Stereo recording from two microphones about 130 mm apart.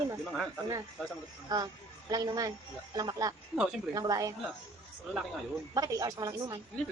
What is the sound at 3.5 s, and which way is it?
Speech, 5° right (ahead or behind).